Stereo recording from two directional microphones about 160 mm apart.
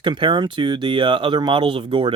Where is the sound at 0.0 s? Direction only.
30° right (ahead or behind).